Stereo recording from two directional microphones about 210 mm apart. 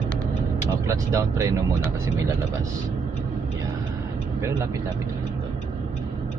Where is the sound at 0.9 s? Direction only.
15° right (ahead or behind).